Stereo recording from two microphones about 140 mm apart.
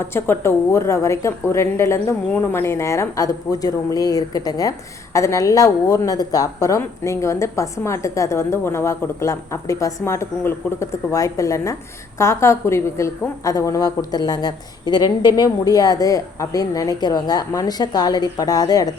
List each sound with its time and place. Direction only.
0.0 s a woman's voice: 20° left (ahead or behind)